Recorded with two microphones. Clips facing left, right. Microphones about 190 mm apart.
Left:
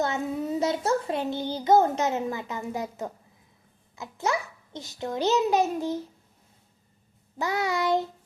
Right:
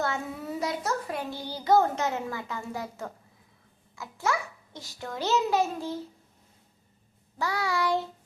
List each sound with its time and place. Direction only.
0.0 s a child's voice: 20° left (ahead or behind)
7.3 s a child's voice: 20° left (ahead or behind)